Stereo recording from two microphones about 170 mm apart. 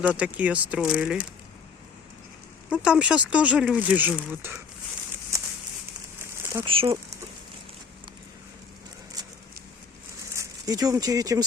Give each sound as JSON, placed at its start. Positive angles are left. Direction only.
{"t": 0.1, "sound": "speech", "side_deg": -10}
{"t": 2.6, "sound": "speech", "side_deg": -5}
{"t": 6.4, "sound": "a sound", "side_deg": -15}
{"t": 6.7, "sound": "speech", "side_deg": -30}
{"t": 9.2, "sound": "a sound", "side_deg": -25}
{"t": 10.3, "sound": "speech", "side_deg": -20}